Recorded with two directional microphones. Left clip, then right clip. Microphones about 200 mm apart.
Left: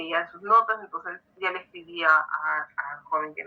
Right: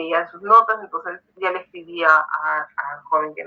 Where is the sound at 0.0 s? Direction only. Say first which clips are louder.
Right 6 dB; 50° right (ahead or behind).